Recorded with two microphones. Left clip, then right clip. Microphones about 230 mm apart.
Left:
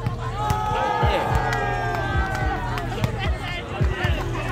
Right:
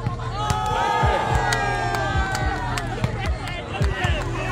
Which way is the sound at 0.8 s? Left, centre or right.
Right.